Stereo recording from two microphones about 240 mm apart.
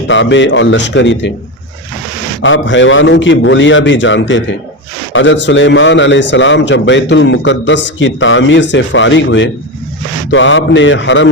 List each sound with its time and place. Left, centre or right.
0.1 s a man's voice: left
2.4 s a man's voice: left